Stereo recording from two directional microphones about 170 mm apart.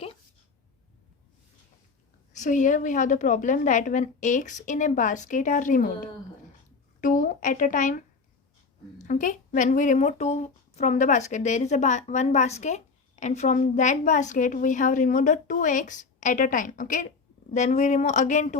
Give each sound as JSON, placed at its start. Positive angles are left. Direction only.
{"t": 2.3, "sound": "a woman's voice", "side_deg": 45}
{"t": 9.0, "sound": "a woman's voice", "side_deg": 50}